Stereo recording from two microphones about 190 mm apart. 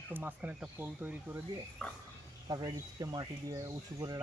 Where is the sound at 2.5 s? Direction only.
20° right (ahead or behind).